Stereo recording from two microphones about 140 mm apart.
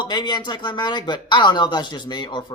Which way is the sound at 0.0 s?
30° left (ahead or behind).